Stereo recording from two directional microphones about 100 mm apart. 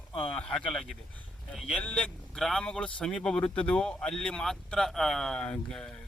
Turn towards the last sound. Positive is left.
turn(degrees=10)  # may be behind; listen again after turning